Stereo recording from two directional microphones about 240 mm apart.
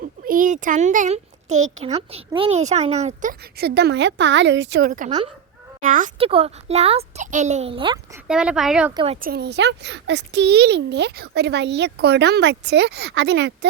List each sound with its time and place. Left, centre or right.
0.0 s a child's voice: right
8.3 s speech: centre
9.2 s a child's voice: right